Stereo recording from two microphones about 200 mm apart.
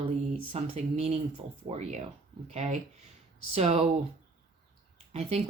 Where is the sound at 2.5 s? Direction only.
35° right (ahead or behind).